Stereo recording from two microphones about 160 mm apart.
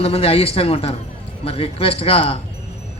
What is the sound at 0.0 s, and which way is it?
A man's voice, 40° left (ahead or behind).